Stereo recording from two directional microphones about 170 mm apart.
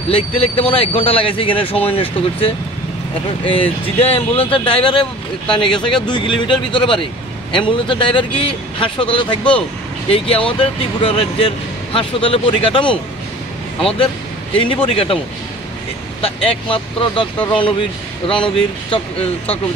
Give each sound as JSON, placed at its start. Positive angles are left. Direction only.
{"t": 0.1, "sound": "speech", "side_deg": 35}
{"t": 14.6, "sound": "speech", "side_deg": 30}
{"t": 16.2, "sound": "speech", "side_deg": 30}